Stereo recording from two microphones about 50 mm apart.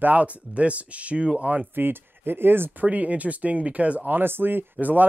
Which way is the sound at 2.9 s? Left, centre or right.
Right.